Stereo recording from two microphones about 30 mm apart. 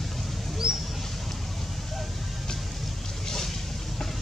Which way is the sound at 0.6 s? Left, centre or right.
Right.